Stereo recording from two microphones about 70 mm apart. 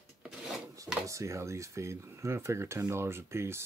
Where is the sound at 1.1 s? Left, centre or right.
Right.